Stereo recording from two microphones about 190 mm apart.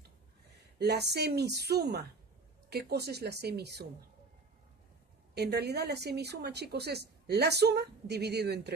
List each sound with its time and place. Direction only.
0.7 s speech: 60° right (ahead or behind)
5.3 s speech: 60° right (ahead or behind)